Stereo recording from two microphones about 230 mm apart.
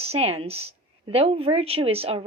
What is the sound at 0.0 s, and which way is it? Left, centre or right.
A woman's voice, right.